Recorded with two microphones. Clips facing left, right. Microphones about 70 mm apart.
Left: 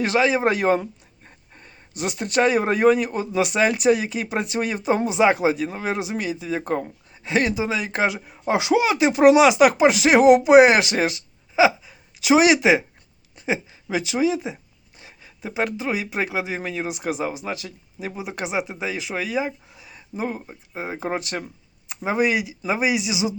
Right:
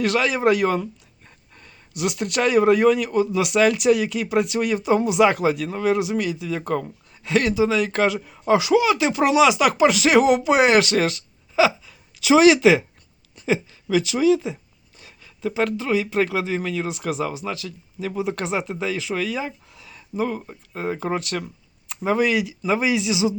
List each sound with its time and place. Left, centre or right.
0.0 s speech: left